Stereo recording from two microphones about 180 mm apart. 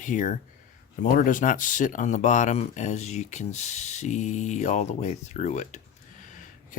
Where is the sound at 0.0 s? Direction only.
45° left (ahead or behind).